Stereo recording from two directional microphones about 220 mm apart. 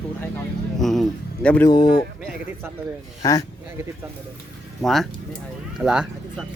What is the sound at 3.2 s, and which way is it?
Speech, 15° left (ahead or behind).